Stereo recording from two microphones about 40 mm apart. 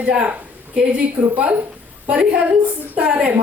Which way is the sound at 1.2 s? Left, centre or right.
Right.